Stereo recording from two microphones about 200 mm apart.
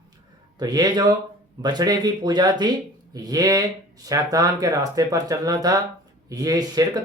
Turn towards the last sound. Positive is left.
turn(degrees=-20)  # may be behind; listen again after turning